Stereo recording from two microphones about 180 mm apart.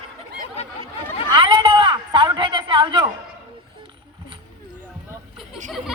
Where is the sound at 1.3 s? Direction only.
25° right (ahead or behind).